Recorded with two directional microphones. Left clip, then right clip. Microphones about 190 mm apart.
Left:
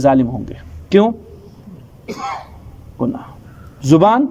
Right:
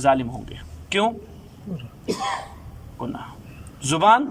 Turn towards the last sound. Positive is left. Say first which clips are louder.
# left 5 dB
turn(degrees=30)  # may be behind; listen again after turning